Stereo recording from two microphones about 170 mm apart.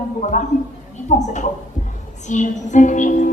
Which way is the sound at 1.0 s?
45° left (ahead or behind).